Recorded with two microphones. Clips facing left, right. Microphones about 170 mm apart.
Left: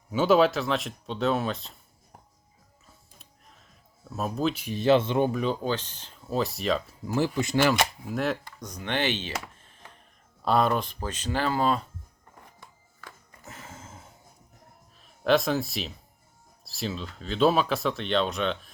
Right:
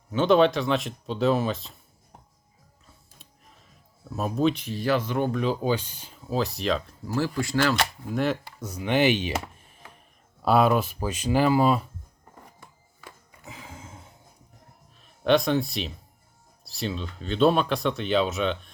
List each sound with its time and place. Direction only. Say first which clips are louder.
0.1 s speech: right 1 dB; 5° left (ahead or behind)
3.2 s a sound: right 1 dB; centre (ahead or behind)
4.7 s speech: left 4 dB; 25° left (ahead or behind)
5.3 s speech: right 1 dB; centre (ahead or behind)
5.6 s speech: right 3 dB; 10° right (ahead or behind)
6.3 s speech: right 1 dB; centre (ahead or behind)
7.1 s speech: left 1 dB; 20° left (ahead or behind)
8.1 s speech: right 2 dB; centre (ahead or behind)
10.4 s speech: right 3 dB; 5° right (ahead or behind)
13.4 s a sound: right 2 dB; centre (ahead or behind)
14.9 s speech: right 2 dB; centre (ahead or behind)